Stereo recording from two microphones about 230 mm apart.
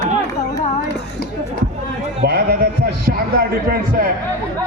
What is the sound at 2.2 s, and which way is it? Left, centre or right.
A man's voice, right.